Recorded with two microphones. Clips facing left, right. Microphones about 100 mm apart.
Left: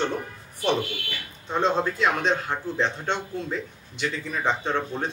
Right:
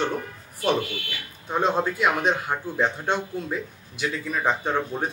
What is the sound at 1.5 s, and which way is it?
A man's voice, 10° right (ahead or behind).